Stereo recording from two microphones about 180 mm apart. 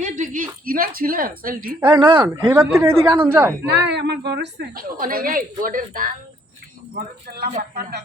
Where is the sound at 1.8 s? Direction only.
25° right (ahead or behind).